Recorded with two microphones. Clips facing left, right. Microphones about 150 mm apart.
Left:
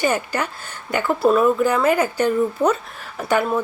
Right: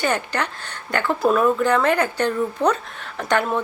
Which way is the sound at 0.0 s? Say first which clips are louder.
Left 2 dB; 10° left (ahead or behind).